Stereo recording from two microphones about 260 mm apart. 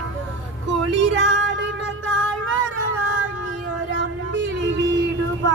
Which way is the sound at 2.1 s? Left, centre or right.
Right.